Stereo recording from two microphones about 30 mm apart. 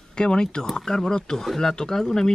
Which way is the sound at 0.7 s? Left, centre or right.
Centre.